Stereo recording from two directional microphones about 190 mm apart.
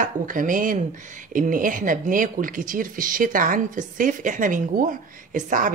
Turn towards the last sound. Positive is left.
turn(degrees=-45)  # may be behind; listen again after turning